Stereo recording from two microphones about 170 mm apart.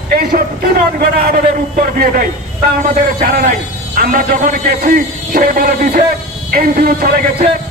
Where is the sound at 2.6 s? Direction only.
60° right (ahead or behind).